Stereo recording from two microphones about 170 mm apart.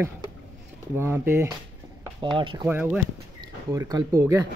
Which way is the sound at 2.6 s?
10° right (ahead or behind).